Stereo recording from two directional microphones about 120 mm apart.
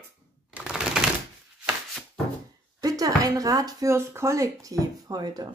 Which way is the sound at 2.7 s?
30° right (ahead or behind).